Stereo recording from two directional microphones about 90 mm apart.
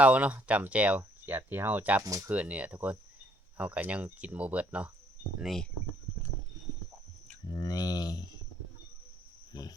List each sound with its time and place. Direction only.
0.0 s speech: 15° right (ahead or behind)
2.0 s speech: 35° right (ahead or behind)
2.3 s speech: 15° right (ahead or behind)
5.4 s speech: centre (ahead or behind)
7.5 s speech: 45° left (ahead or behind)
9.5 s cricket: 50° left (ahead or behind)